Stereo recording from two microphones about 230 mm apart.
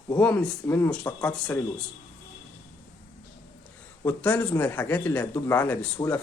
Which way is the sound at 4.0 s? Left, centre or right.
Centre.